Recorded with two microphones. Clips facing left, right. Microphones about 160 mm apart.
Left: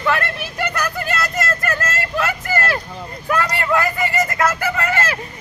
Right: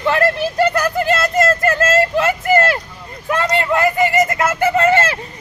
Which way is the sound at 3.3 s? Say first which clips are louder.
Right 2 dB; 25° right (ahead or behind).